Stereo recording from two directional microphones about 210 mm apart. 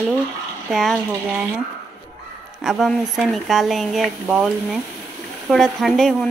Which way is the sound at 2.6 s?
Centre (ahead or behind).